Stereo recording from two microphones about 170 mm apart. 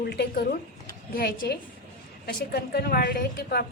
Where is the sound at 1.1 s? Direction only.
60° left (ahead or behind).